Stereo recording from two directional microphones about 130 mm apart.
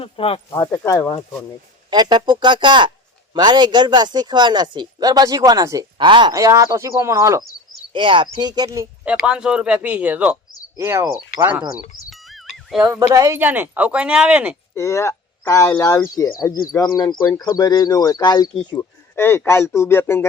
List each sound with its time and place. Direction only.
0.0 s speech: 45° left (ahead or behind)
0.5 s speech: 25° left (ahead or behind)
1.9 s speech: 35° right (ahead or behind)
6.0 s speech: 40° right (ahead or behind)
6.3 s speech: 25° right (ahead or behind)
7.9 s speech: 40° right (ahead or behind)
9.0 s speech: 5° right (ahead or behind)
12.1 s music: centre (ahead or behind)
13.0 s speech: 25° right (ahead or behind)
13.4 s speech: 15° right (ahead or behind)
14.8 s speech: 20° left (ahead or behind)
19.1 s a man's voice: 15° left (ahead or behind)